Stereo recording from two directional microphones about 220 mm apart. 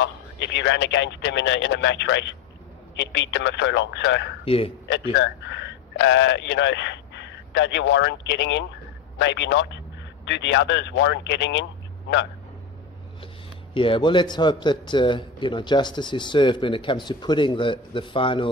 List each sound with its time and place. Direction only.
0.0 s speech: 55° left (ahead or behind)
4.5 s a man's voice: 25° left (ahead or behind)
5.1 s a man's voice: 55° left (ahead or behind)
13.7 s a man's voice: 25° left (ahead or behind)